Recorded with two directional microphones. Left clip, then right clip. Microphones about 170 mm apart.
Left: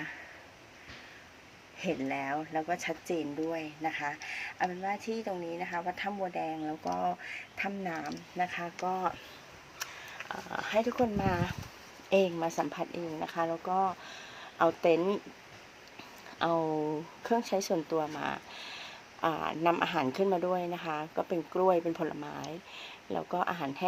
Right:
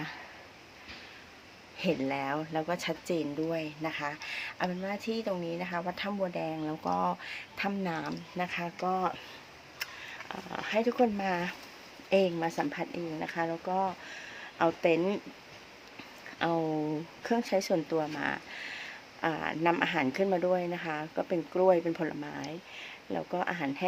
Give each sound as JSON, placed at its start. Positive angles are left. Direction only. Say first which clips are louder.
{"t": 1.8, "sound": "speech", "louder": "right 3 dB", "side_deg": -25}
{"t": 10.2, "sound": "speech", "louder": "left 1 dB", "side_deg": -10}
{"t": 16.4, "sound": "speech", "louder": "left 1 dB", "side_deg": -10}